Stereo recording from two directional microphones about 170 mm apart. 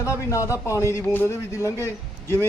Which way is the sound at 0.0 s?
15° left (ahead or behind).